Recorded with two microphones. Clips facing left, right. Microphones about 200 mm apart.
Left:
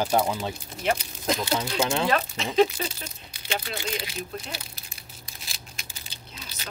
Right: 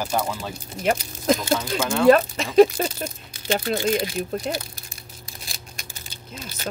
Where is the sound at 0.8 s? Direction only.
45° right (ahead or behind).